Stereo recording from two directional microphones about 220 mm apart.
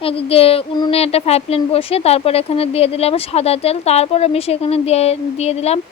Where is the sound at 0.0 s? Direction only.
25° left (ahead or behind).